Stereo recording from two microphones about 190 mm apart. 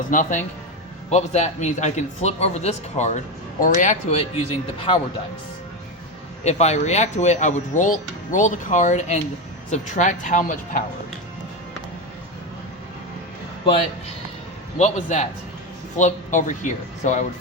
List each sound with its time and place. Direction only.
0.1 s a man's voice: 45° left (ahead or behind)
6.4 s speech: 35° left (ahead or behind)
14.8 s speech: 35° left (ahead or behind)